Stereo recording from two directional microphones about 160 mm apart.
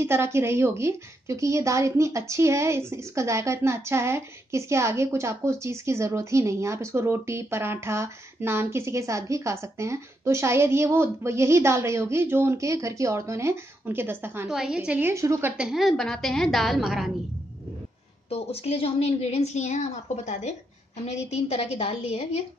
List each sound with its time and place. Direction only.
0.0 s a woman's voice: 15° right (ahead or behind)
14.5 s a woman's voice: 5° right (ahead or behind)
15.5 s a woman's voice: 5° right (ahead or behind)
18.3 s a woman's voice: 40° left (ahead or behind)